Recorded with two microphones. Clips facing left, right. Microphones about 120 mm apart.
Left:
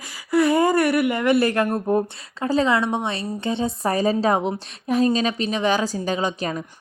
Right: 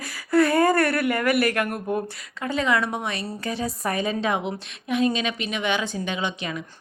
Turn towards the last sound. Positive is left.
turn(degrees=40)  # may be behind; listen again after turning